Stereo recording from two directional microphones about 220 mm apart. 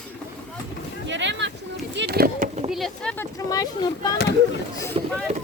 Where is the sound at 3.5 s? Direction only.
20° left (ahead or behind).